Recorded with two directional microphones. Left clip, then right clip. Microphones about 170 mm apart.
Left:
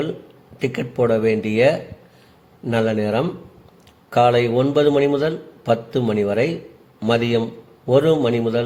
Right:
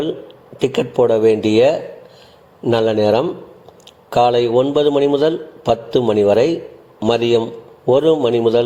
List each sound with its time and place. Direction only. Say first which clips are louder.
0.6 s a man's voice: right 6 dB; 15° right (ahead or behind)